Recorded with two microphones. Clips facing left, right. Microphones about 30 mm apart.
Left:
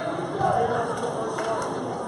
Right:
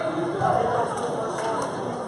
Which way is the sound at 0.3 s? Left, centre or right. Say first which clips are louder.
Even; centre.